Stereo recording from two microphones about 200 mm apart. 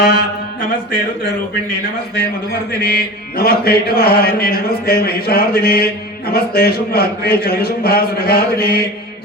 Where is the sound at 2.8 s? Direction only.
50° left (ahead or behind).